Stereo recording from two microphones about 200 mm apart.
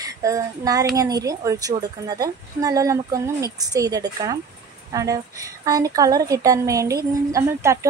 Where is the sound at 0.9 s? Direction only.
15° right (ahead or behind).